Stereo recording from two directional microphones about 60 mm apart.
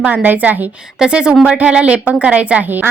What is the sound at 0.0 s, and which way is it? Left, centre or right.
Speech, right.